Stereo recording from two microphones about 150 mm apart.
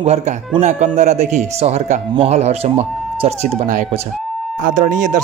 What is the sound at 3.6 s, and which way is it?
Speech, 60° right (ahead or behind).